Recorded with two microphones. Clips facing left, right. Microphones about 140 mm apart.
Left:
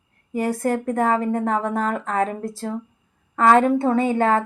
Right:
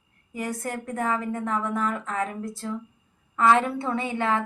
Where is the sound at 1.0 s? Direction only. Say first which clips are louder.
Left 5 dB; 35° left (ahead or behind).